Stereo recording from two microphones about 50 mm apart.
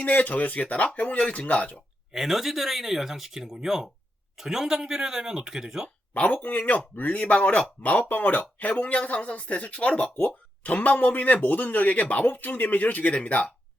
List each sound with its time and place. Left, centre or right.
0.0 s speech: left
1.7 s speech: centre
6.1 s speech: left
8.7 s speech: left